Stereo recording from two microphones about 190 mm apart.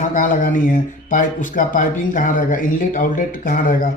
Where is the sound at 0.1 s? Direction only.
45° left (ahead or behind).